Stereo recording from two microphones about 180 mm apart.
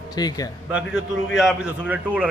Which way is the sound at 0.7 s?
5° right (ahead or behind).